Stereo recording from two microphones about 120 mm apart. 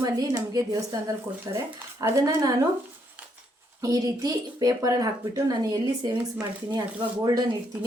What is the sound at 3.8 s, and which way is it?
A woman's voice, 30° right (ahead or behind).